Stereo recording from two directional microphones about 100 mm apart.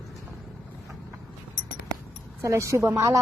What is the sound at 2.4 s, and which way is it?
Speech, 30° right (ahead or behind).